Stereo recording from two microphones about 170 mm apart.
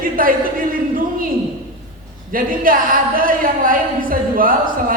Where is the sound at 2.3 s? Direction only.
55° right (ahead or behind).